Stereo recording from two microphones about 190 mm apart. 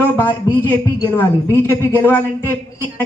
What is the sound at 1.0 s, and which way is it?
A woman's voice, 15° left (ahead or behind).